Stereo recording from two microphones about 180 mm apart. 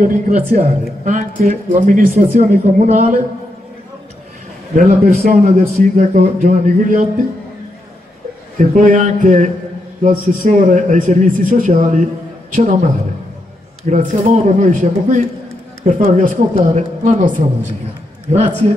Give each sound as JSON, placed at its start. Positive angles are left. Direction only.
{"t": 0.0, "sound": "a man's voice", "side_deg": -45}
{"t": 4.7, "sound": "a man's voice", "side_deg": -45}
{"t": 8.5, "sound": "a man's voice", "side_deg": -45}